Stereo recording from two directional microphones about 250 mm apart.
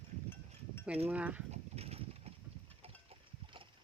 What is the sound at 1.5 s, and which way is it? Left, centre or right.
Clip-clop, right.